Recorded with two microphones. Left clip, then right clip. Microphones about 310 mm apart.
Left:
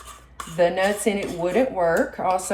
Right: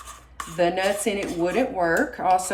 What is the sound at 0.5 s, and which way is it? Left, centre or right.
Speech, centre.